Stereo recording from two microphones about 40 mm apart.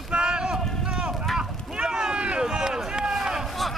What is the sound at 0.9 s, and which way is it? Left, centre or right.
Clip-clop, right.